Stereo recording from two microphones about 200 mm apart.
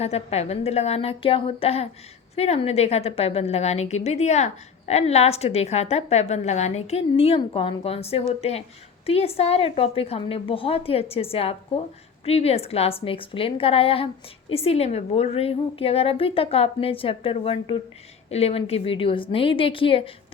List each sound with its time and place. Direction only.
0.0 s a woman's voice: 30° left (ahead or behind)